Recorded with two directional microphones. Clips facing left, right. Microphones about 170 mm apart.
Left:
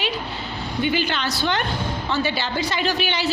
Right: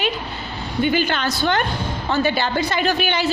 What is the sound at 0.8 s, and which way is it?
A woman's voice, 50° right (ahead or behind).